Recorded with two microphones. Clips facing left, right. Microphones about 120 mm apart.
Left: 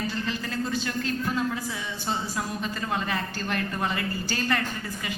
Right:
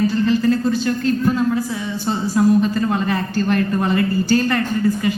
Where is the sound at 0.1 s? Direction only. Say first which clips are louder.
Right 15 dB; 35° right (ahead or behind).